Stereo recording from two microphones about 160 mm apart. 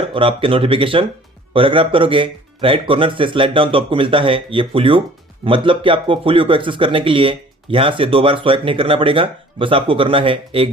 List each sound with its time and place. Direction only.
0.1 s speech: 35° right (ahead or behind)